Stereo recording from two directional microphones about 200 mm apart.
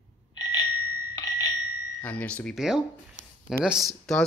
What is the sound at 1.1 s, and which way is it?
Bell, 20° left (ahead or behind).